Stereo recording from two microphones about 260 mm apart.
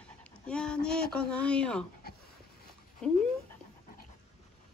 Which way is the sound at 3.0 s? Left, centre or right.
Centre.